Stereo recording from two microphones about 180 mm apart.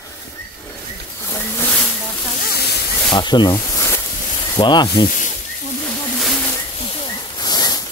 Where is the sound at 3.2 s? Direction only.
25° left (ahead or behind).